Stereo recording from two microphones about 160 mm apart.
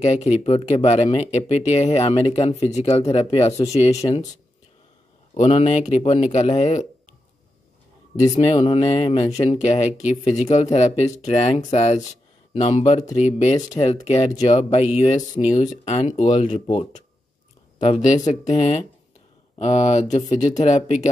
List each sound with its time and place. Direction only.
0.0 s speech: 45° left (ahead or behind)
5.3 s speech: 40° left (ahead or behind)
8.2 s speech: 35° left (ahead or behind)